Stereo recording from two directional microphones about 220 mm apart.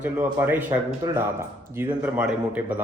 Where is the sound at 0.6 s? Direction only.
20° right (ahead or behind).